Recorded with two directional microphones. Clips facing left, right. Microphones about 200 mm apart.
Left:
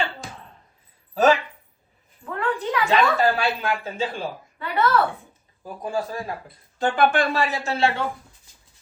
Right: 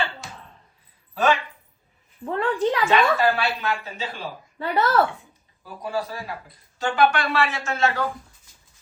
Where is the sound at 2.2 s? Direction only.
30° right (ahead or behind).